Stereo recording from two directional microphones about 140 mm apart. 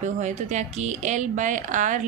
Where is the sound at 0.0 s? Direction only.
60° right (ahead or behind).